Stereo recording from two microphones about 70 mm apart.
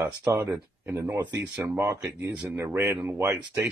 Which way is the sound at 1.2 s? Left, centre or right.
Right.